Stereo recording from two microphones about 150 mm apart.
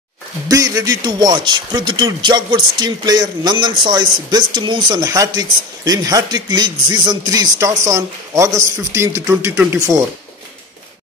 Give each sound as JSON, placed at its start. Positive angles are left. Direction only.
{"t": 0.5, "sound": "a man's voice", "side_deg": -25}